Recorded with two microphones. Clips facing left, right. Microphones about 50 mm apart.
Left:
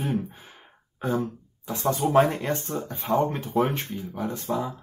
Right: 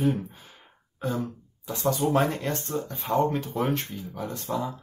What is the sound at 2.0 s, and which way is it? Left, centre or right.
Speech, centre.